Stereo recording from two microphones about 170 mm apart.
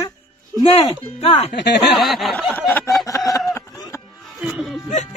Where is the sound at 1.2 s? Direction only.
35° left (ahead or behind).